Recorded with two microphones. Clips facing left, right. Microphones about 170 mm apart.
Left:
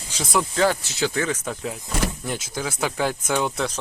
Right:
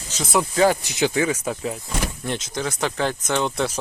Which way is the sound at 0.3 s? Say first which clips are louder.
Right 2 dB; centre (ahead or behind).